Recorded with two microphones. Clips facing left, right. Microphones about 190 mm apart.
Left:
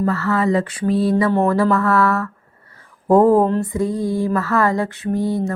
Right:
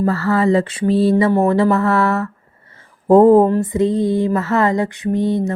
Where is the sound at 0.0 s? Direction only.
35° right (ahead or behind).